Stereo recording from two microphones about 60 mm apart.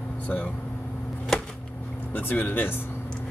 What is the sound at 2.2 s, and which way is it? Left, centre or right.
Speech, left.